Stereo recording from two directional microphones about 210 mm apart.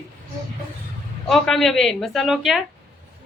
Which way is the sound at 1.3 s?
Centre (ahead or behind).